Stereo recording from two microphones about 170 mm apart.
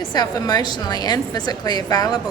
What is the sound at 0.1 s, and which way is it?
A woman's voice, 25° left (ahead or behind).